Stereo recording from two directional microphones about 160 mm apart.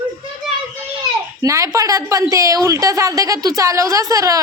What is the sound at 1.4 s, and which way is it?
A woman's voice, 20° right (ahead or behind).